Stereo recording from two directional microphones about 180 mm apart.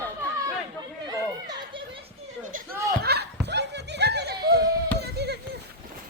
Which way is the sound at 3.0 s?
65° right (ahead or behind).